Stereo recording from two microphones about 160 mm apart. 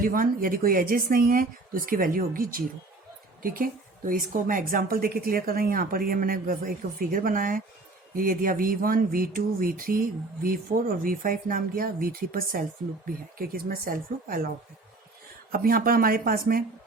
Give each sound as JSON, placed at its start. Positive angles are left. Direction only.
{"t": 0.0, "sound": "speech", "side_deg": -60}
{"t": 15.5, "sound": "speech", "side_deg": -65}